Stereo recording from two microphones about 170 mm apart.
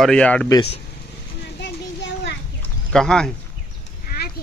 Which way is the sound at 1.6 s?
90° left.